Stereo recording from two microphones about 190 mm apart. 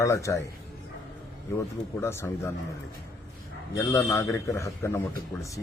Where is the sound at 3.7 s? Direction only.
15° left (ahead or behind).